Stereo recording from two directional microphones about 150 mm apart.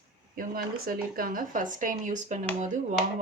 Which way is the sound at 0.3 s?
75° right (ahead or behind).